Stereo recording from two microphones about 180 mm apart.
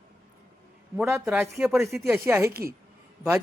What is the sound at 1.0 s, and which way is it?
A woman's voice, 15° right (ahead or behind).